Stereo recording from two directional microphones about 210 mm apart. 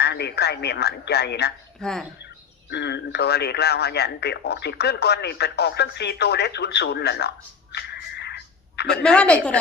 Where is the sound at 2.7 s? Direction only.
55° left (ahead or behind).